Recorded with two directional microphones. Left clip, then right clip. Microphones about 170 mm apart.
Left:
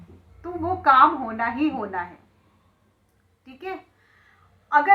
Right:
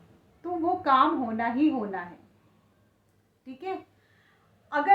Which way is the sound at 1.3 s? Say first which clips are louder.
Left 2 dB; 35° right (ahead or behind).